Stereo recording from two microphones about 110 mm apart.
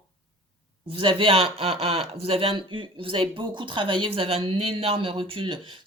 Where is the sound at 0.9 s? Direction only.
50° right (ahead or behind).